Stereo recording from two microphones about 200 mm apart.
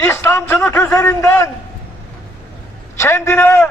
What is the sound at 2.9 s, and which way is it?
Speech, 15° left (ahead or behind).